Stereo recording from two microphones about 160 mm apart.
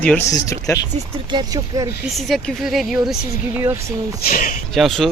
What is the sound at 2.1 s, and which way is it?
A woman's voice, centre (ahead or behind).